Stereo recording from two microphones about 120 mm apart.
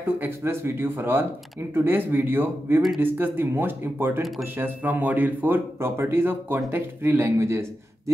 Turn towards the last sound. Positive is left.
turn(degrees=-20)  # may be behind; listen again after turning